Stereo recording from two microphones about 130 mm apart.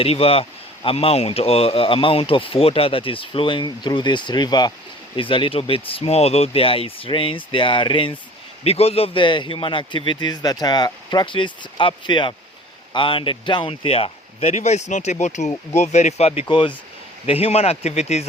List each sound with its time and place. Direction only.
0.0 s a man's voice: 50° left (ahead or behind)
17.2 s speech: 50° left (ahead or behind)